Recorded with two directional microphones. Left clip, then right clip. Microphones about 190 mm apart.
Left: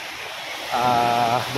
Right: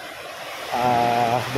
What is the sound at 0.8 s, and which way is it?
Mantra, 5° right (ahead or behind).